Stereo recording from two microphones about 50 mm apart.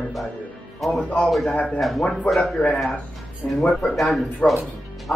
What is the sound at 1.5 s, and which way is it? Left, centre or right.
Speech, left.